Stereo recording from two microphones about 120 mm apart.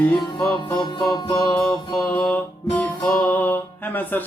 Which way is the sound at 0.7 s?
45° left (ahead or behind).